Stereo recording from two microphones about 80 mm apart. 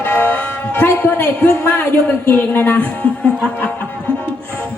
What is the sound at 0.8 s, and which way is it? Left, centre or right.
A man's voice, left.